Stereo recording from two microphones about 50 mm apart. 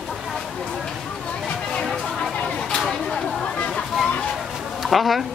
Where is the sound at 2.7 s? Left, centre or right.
Centre.